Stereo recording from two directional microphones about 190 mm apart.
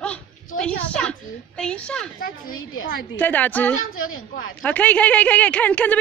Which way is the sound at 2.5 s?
90° left.